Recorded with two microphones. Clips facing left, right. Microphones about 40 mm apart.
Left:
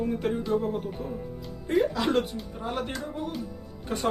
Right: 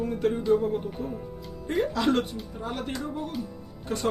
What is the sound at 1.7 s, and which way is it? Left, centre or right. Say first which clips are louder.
Speech: even; centre.